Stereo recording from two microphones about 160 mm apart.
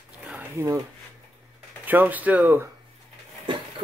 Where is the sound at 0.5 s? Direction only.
20° right (ahead or behind).